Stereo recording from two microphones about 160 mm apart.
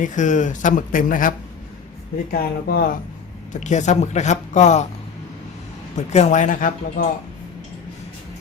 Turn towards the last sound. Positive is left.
turn(degrees=60)  # may be behind; listen again after turning